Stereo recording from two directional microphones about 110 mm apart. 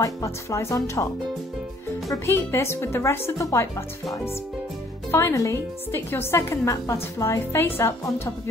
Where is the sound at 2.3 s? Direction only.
25° left (ahead or behind).